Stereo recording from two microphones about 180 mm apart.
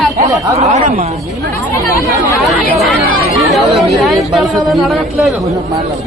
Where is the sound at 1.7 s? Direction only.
15° left (ahead or behind).